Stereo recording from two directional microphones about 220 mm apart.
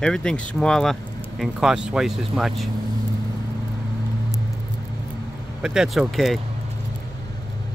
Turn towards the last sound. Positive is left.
turn(degrees=0)  # may be behind; listen again after turning